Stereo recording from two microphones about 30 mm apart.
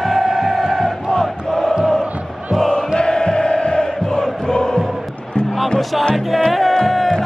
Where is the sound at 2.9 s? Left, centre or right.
Left.